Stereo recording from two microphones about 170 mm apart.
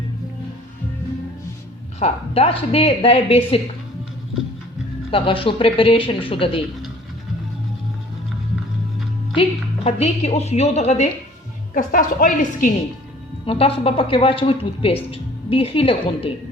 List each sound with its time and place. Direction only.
2.0 s speech: 40° left (ahead or behind)
5.1 s speech: 30° left (ahead or behind)
9.3 s a woman's voice: 35° left (ahead or behind); by 12.7 s 50° left (ahead or behind)
13.4 s speech: 35° left (ahead or behind)